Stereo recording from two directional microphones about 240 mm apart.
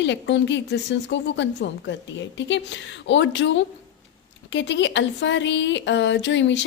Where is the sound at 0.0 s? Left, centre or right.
Left.